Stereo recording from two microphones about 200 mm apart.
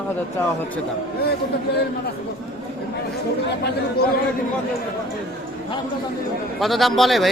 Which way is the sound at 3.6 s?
50° left (ahead or behind).